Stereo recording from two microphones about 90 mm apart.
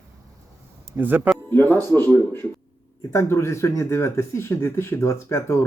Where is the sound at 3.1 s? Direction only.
35° left (ahead or behind).